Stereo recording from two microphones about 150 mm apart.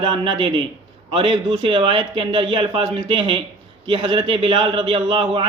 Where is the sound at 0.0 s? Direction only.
35° right (ahead or behind).